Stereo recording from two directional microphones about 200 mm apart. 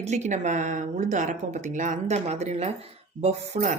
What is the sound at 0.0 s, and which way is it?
Speech, 35° right (ahead or behind).